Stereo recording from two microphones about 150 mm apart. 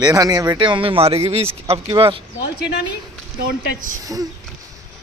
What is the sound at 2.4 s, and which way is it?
Speech, 90° left.